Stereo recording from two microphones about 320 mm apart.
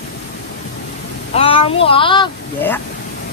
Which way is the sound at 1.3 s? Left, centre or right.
Centre.